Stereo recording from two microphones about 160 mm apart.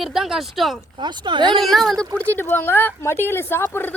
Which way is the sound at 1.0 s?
30° right (ahead or behind).